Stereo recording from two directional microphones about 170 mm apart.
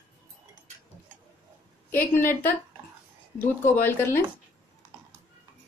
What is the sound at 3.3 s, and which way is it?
Speech, 10° left (ahead or behind).